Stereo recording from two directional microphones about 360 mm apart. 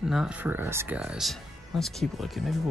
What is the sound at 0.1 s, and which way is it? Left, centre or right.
Speech, centre.